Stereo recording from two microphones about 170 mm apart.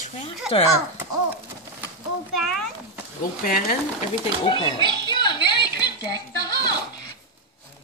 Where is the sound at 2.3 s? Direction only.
Centre (ahead or behind).